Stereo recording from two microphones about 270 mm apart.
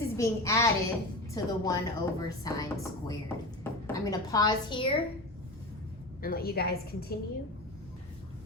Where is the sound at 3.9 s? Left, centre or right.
Centre.